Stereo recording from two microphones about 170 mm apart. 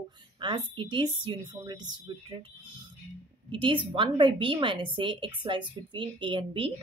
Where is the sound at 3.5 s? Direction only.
30° right (ahead or behind).